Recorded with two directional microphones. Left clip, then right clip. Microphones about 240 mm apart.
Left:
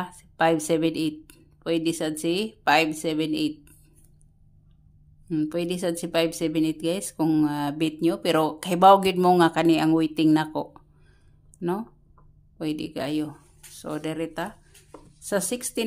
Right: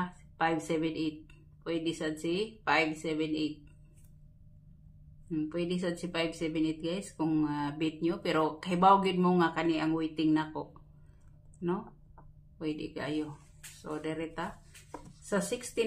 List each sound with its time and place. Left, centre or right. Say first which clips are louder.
0.0 s speech: left 9 dB; left
5.3 s speech: left 7 dB; left
12.5 s speech: left 7 dB; left